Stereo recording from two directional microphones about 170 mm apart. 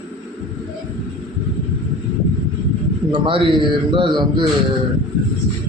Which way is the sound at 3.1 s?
30° right (ahead or behind).